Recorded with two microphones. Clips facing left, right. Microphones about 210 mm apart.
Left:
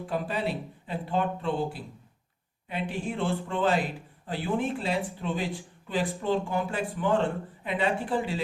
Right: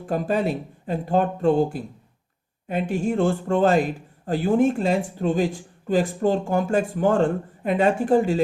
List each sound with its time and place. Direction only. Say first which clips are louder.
0.0 s speech: right 7 dB; 45° right (ahead or behind)